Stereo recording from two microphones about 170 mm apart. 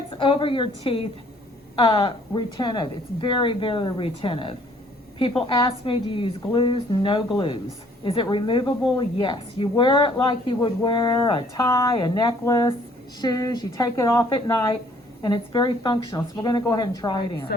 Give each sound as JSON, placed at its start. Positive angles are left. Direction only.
{"t": 0.1, "sound": "a woman's voice", "side_deg": 30}
{"t": 14.3, "sound": "a woman's voice", "side_deg": 30}